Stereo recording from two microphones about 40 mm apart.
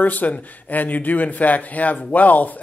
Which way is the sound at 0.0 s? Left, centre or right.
Left.